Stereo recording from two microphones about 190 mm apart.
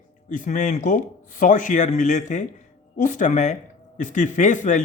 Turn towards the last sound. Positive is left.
turn(degrees=40)  # may be behind; listen again after turning